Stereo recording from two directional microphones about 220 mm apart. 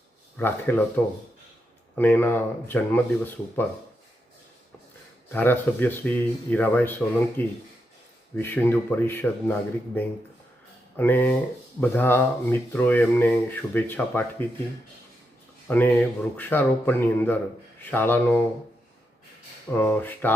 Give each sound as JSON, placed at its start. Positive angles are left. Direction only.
{"t": 0.3, "sound": "speech", "side_deg": 10}
{"t": 2.0, "sound": "speech", "side_deg": 10}
{"t": 5.3, "sound": "speech", "side_deg": 10}
{"t": 15.6, "sound": "speech", "side_deg": 10}
{"t": 19.7, "sound": "speech", "side_deg": 10}